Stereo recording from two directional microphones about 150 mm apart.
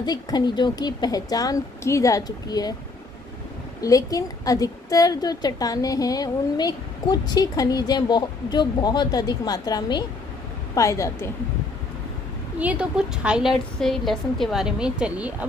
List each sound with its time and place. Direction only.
0.0 s a woman's voice: 25° left (ahead or behind)
3.8 s a woman's voice: 25° left (ahead or behind)
12.5 s a woman's voice: 10° right (ahead or behind)